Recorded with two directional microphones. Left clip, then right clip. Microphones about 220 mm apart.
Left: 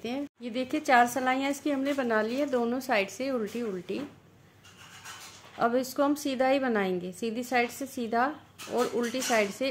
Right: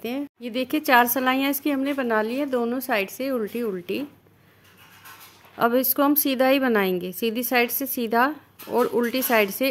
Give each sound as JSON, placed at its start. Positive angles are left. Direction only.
{"t": 0.0, "sound": "a woman's voice", "side_deg": -40}
{"t": 5.6, "sound": "a woman's voice", "side_deg": -40}